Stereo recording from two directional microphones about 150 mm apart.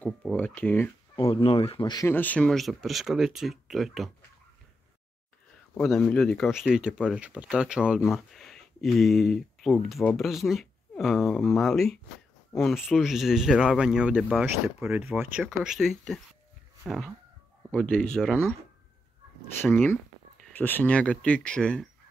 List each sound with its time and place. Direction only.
0.0 s speech: 10° left (ahead or behind)
1.3 s speech: 40° left (ahead or behind)
2.0 s speech: 10° left (ahead or behind)
5.8 s speech: 5° left (ahead or behind)
19.6 s speech: 10° left (ahead or behind)